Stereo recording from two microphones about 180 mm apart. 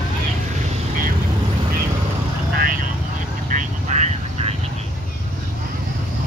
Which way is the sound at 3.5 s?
45° right (ahead or behind).